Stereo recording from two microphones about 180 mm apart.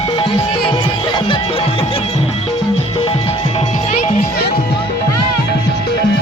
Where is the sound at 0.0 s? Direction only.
30° left (ahead or behind).